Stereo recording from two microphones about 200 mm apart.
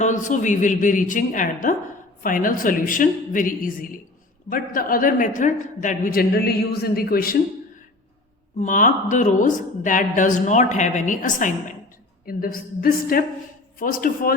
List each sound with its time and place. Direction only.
0.0 s a woman's voice: 40° left (ahead or behind)
8.5 s a woman's voice: 40° left (ahead or behind)